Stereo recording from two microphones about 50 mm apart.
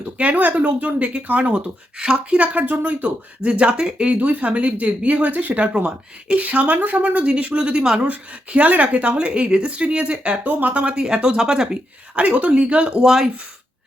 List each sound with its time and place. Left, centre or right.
0.2 s a woman's voice: right
2.0 s speech: centre
2.3 s a woman's voice: right
3.4 s a woman's voice: right
7.6 s a woman's voice: centre
8.0 s a woman's voice: right
11.0 s speech: centre
12.2 s a woman's voice: right